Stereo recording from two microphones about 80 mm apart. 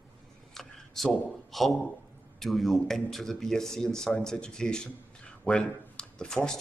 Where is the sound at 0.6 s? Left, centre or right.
Centre.